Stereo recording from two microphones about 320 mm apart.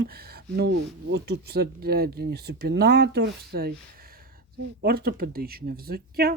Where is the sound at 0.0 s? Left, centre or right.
Right.